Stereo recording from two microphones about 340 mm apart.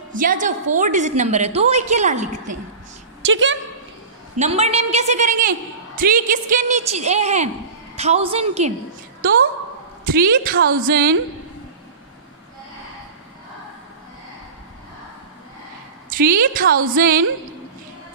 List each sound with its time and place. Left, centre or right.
0.1 s a woman's voice: right
3.3 s a woman's voice: right
4.4 s a woman's voice: centre
10.0 s a woman's voice: right
16.1 s a woman's voice: right